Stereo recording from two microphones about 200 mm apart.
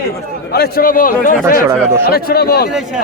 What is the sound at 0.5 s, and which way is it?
A man's voice, 50° left (ahead or behind).